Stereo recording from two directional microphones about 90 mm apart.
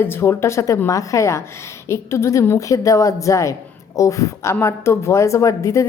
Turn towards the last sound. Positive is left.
turn(degrees=35)  # may be behind; listen again after turning